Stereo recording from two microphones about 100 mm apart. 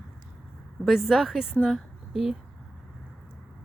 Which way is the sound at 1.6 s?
5° right (ahead or behind).